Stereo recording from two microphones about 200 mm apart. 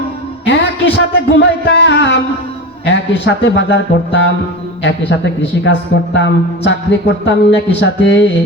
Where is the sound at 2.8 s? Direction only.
60° left (ahead or behind).